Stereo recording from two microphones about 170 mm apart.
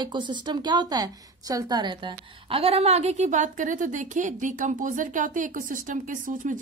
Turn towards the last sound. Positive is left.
turn(degrees=-50)  # may be behind; listen again after turning